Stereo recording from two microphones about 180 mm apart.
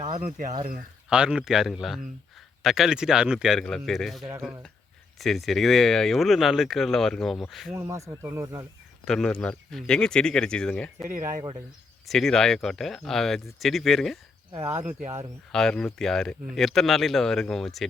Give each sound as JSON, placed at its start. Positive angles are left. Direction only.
{"t": 0.1, "sound": "speech", "side_deg": -40}
{"t": 1.1, "sound": "speech", "side_deg": -5}
{"t": 7.7, "sound": "speech", "side_deg": -15}
{"t": 9.0, "sound": "speech", "side_deg": 5}
{"t": 12.0, "sound": "speech", "side_deg": 0}
{"t": 14.5, "sound": "speech", "side_deg": -15}
{"t": 15.5, "sound": "speech", "side_deg": 5}